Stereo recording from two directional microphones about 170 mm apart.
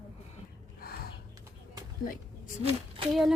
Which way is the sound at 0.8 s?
65° left (ahead or behind).